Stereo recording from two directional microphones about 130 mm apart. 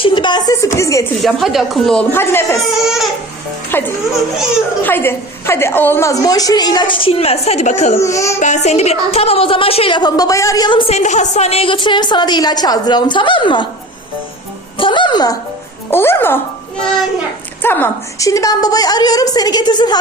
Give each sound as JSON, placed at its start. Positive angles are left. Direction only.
{"t": 0.0, "sound": "a woman's voice", "side_deg": 40}
{"t": 1.2, "sound": "speech", "side_deg": 0}
{"t": 2.1, "sound": "a woman's voice", "side_deg": 20}
{"t": 2.8, "sound": "baby cry", "side_deg": 0}
{"t": 3.7, "sound": "a woman's voice", "side_deg": 15}
{"t": 7.9, "sound": "a woman's voice", "side_deg": 25}
{"t": 8.4, "sound": "a woman's voice", "side_deg": 65}
{"t": 10.7, "sound": "a woman's voice", "side_deg": 40}
{"t": 10.9, "sound": "a woman's voice", "side_deg": 65}
{"t": 14.8, "sound": "a woman's voice", "side_deg": 40}
{"t": 15.9, "sound": "a child's voice", "side_deg": 15}
{"t": 17.6, "sound": "a woman's voice", "side_deg": 15}